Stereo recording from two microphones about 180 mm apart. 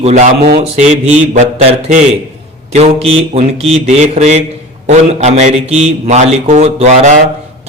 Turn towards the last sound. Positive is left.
turn(degrees=-40)  # may be behind; listen again after turning